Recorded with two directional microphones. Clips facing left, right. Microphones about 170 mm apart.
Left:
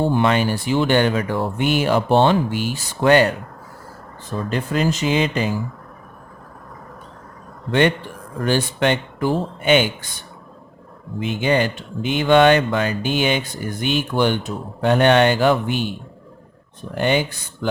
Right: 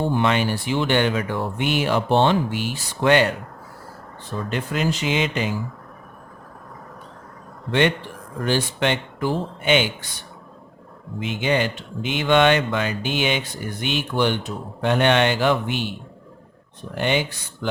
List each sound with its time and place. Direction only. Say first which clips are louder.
0.2 s speech: left 3 dB; 40° left (ahead or behind)
4.4 s speech: left 3 dB; 35° left (ahead or behind)
7.7 s speech: left 2 dB; 45° left (ahead or behind)
11.3 s speech: left 3 dB; 40° left (ahead or behind)
16.9 s speech: left 3 dB; 45° left (ahead or behind)